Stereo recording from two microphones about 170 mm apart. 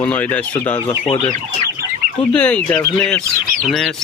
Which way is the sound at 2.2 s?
5° left (ahead or behind).